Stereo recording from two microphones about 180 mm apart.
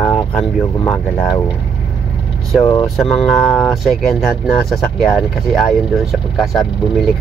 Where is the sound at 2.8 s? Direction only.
Centre (ahead or behind).